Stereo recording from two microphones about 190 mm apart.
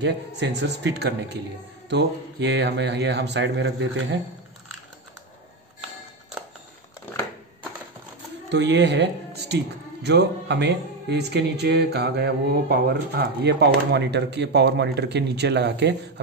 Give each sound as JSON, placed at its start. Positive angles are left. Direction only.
{"t": 0.0, "sound": "speech", "side_deg": -65}
{"t": 8.5, "sound": "speech", "side_deg": -65}